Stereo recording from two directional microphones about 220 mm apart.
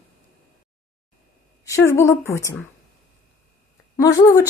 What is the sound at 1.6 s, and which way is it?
Speech, 15° left (ahead or behind).